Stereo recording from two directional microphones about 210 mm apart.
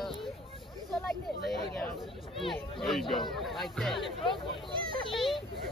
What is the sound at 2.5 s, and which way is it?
Speech, centre (ahead or behind).